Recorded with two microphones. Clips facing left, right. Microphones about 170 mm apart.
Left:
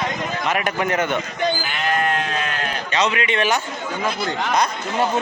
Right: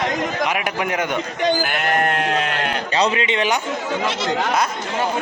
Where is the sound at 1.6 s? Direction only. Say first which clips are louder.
Right 3 dB; 60° right (ahead or behind).